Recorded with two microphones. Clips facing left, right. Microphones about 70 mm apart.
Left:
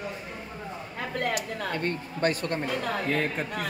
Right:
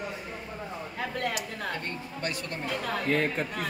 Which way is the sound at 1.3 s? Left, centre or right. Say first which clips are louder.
Left 3 dB; left.